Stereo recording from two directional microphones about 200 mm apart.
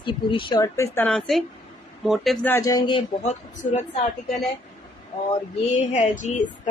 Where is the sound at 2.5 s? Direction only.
15° left (ahead or behind).